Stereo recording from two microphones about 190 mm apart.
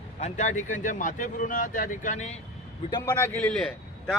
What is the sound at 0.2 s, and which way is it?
Speech, 40° left (ahead or behind).